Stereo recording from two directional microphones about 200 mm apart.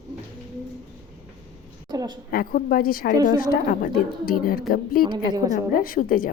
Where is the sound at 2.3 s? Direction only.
45° left (ahead or behind).